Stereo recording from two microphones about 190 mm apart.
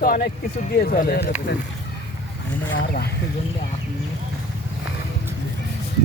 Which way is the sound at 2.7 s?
70° left (ahead or behind).